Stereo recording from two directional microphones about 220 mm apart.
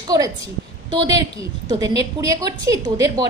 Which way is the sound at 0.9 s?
15° right (ahead or behind).